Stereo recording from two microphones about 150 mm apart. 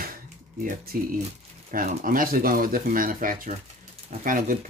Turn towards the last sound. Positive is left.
turn(degrees=-65)  # may be behind; listen again after turning